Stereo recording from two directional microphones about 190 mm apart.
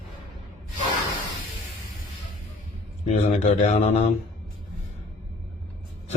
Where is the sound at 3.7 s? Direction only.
35° left (ahead or behind).